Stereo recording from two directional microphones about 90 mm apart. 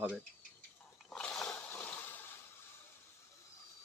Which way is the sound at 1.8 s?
20° left (ahead or behind).